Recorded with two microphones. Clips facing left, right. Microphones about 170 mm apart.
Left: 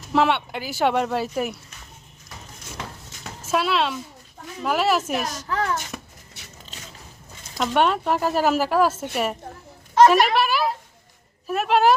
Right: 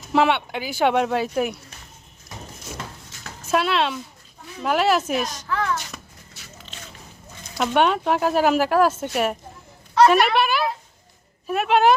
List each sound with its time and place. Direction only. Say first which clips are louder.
0.1 s speech: right 1 dB; centre (ahead or behind)
3.4 s speech: right 1 dB; centre (ahead or behind)
5.5 s a child's voice: left 1 dB; 40° left (ahead or behind)
7.6 s speech: right 1 dB; centre (ahead or behind)